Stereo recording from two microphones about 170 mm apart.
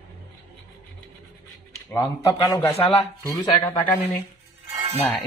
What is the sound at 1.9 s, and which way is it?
A man's voice, 20° left (ahead or behind).